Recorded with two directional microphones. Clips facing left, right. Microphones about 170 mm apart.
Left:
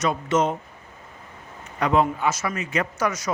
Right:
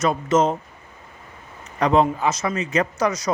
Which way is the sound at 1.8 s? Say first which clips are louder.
Right 3 dB; 30° right (ahead or behind).